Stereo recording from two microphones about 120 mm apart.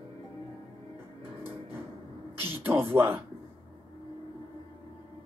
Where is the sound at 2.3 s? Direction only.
20° right (ahead or behind).